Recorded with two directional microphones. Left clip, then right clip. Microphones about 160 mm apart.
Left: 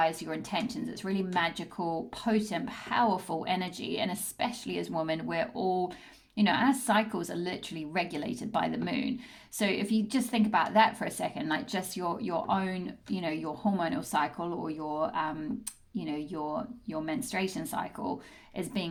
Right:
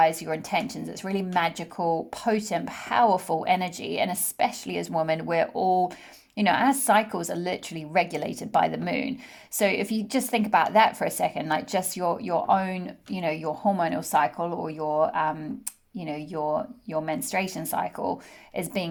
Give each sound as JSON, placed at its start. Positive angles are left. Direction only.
{"t": 0.0, "sound": "a woman's voice", "side_deg": -50}